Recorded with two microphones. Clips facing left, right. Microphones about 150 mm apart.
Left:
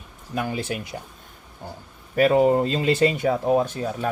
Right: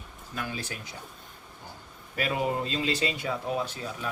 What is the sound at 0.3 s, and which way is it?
Speech, 60° left (ahead or behind).